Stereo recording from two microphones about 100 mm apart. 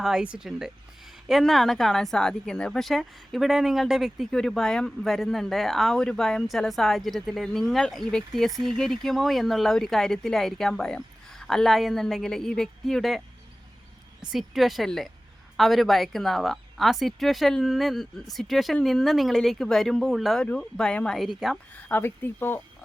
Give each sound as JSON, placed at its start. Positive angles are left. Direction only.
{"t": 0.0, "sound": "speech", "side_deg": -5}
{"t": 21.7, "sound": "speech", "side_deg": 15}